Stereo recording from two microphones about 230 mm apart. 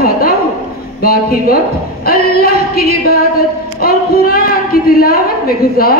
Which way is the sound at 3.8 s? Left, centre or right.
Left.